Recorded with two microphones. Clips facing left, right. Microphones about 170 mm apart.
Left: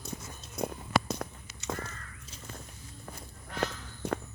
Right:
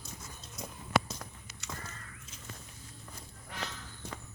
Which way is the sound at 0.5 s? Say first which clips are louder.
Left 2 dB; 60° left (ahead or behind).